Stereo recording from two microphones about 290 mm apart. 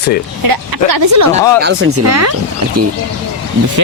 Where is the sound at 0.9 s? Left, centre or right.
Right.